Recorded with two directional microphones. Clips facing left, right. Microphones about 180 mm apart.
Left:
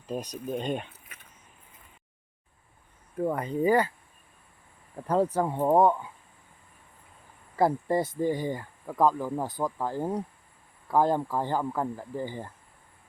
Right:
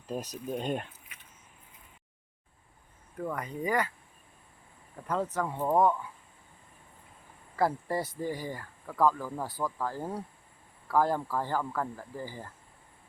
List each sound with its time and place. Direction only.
0.1 s speech: centre (ahead or behind)
3.2 s speech: 30° left (ahead or behind)
4.9 s speech: 35° left (ahead or behind)
7.5 s speech: 20° left (ahead or behind)